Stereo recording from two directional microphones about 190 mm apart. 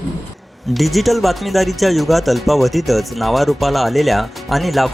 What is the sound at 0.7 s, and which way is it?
Speech, centre (ahead or behind).